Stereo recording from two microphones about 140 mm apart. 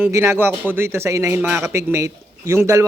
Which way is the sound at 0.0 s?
20° right (ahead or behind).